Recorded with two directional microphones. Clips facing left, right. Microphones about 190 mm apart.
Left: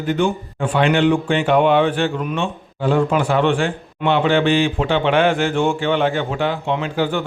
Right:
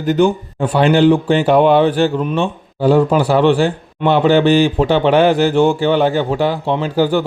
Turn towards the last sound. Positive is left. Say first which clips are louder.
# right 5 dB
turn(degrees=-35)  # may be behind; listen again after turning